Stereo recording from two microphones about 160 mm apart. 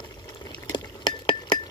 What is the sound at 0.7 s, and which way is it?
Stir, 30° left (ahead or behind).